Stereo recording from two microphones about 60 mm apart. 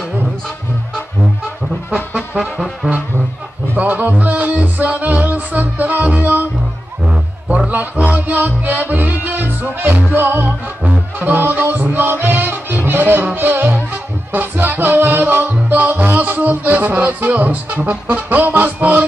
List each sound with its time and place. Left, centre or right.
1.9 s music: centre
2.8 s brass instrument: right
3.7 s music: right